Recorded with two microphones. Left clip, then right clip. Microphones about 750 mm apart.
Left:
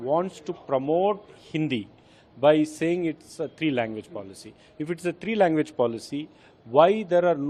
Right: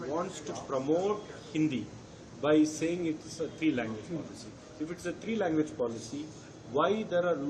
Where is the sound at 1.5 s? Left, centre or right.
Left.